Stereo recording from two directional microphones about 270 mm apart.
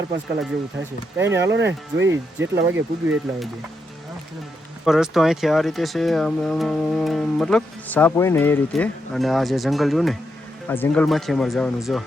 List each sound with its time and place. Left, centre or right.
1.2 s speech: centre
1.5 s speech: right
2.6 s speech: centre
4.9 s speech: centre